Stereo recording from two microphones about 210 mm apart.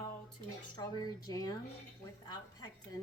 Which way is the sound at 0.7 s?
20° left (ahead or behind).